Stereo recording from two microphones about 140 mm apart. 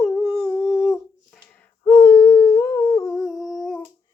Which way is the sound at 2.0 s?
15° left (ahead or behind).